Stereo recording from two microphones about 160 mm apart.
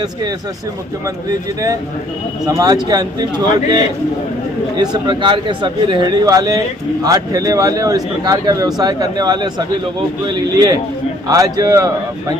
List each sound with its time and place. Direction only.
2.4 s speech: 25° right (ahead or behind)